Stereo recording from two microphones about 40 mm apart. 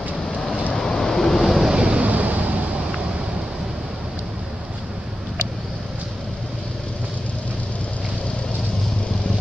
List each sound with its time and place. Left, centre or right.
0.7 s vehicle: centre
1.4 s vehicle: centre
1.7 s vehicle: right
2.0 s vehicle: right